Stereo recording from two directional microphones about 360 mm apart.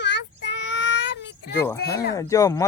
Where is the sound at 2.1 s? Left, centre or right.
Centre.